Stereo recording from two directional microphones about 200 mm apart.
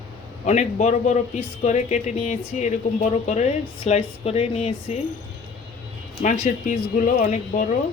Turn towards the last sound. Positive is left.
turn(degrees=40)  # may be behind; listen again after turning